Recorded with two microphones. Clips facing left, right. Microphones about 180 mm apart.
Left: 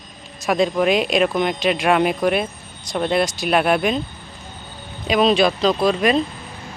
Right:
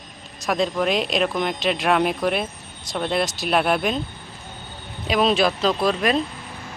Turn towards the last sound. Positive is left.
turn(degrees=0)  # may be behind; listen again after turning